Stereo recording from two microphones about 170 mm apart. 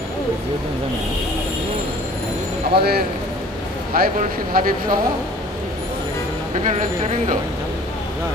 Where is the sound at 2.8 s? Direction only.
65° right (ahead or behind).